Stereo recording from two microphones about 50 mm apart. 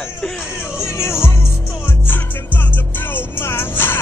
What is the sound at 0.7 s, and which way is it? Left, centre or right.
Music, left.